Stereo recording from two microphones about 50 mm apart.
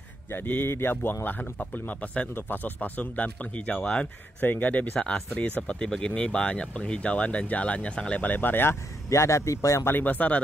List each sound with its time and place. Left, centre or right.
0.3 s speech: left
1.2 s speech: left
4.4 s speech: left
8.2 s speech: left
9.1 s a man's voice: left
9.8 s speech: left